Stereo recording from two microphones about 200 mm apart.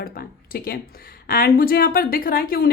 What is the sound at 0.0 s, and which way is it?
A woman's voice, 50° left (ahead or behind).